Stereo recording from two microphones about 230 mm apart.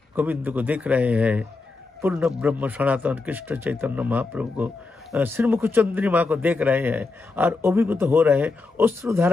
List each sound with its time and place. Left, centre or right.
0.1 s a man's voice: centre